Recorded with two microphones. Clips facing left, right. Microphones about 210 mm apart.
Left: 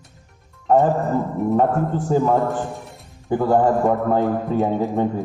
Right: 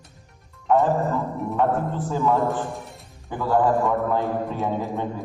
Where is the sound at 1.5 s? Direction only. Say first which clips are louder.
Left 3 dB; 45° left (ahead or behind).